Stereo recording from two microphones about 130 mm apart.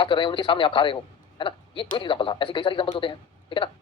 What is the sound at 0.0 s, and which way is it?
Speech, 40° left (ahead or behind).